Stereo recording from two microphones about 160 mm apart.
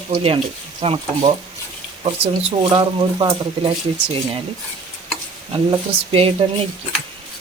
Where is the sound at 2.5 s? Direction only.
30° right (ahead or behind).